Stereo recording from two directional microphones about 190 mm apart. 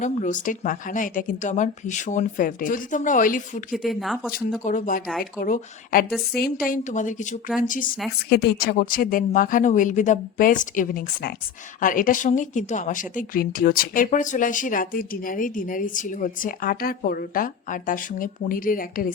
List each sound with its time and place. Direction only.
0.0 s a woman's voice: 40° left (ahead or behind)
3.7 s speech: centre (ahead or behind)
4.6 s a woman's voice: 45° left (ahead or behind)
8.3 s a woman's voice: 55° left (ahead or behind)